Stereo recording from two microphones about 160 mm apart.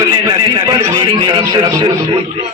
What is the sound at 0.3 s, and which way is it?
Music, 25° right (ahead or behind).